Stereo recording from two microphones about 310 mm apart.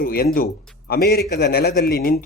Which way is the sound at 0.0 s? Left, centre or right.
Left.